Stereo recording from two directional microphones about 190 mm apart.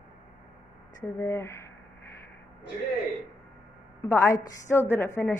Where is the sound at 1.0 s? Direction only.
15° left (ahead or behind).